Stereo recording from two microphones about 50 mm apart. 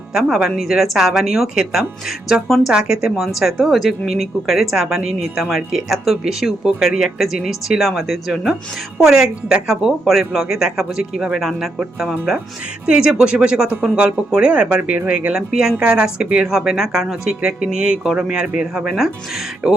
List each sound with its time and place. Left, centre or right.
0.1 s a woman's voice: centre
7.8 s speech: centre
9.0 s a woman's voice: centre
12.8 s a woman's voice: centre
15.3 s a woman's voice: centre
18.9 s speech: centre
19.6 s speech: centre